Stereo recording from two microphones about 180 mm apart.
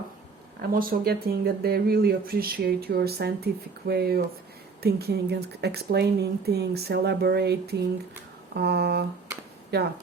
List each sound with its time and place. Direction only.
0.6 s speech: 55° right (ahead or behind)